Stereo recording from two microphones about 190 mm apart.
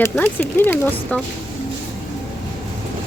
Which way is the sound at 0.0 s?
10° left (ahead or behind).